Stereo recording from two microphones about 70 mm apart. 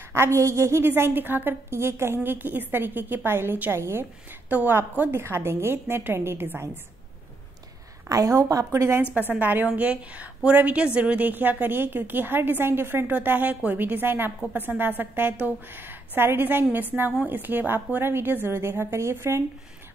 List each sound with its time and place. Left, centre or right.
0.1 s a woman's voice: right
4.5 s a woman's voice: right
8.1 s a woman's voice: right
9.3 s a woman's voice: right